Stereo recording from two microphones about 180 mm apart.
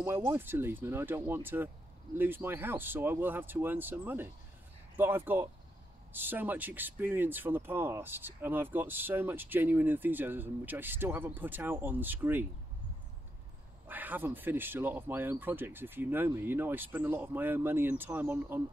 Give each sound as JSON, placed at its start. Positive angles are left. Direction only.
{"t": 0.0, "sound": "speech", "side_deg": -15}
{"t": 13.8, "sound": "speech", "side_deg": -10}